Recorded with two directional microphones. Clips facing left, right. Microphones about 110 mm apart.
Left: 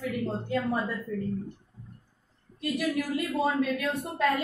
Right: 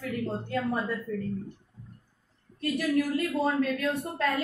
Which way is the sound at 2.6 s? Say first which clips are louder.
Right 2 dB; 15° left (ahead or behind).